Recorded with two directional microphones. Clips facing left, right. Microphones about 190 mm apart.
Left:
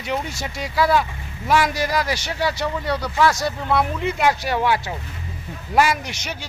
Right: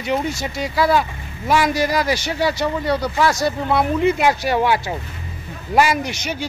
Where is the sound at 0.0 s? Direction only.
Centre (ahead or behind).